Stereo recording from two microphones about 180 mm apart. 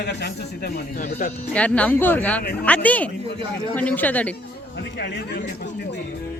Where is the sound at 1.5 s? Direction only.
5° left (ahead or behind).